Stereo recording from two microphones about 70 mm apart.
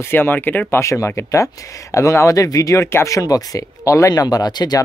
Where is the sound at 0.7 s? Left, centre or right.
Left.